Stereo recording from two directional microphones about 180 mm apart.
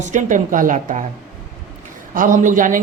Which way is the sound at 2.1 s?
45° right (ahead or behind).